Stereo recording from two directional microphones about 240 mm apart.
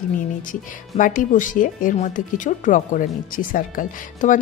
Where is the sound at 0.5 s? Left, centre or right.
Left.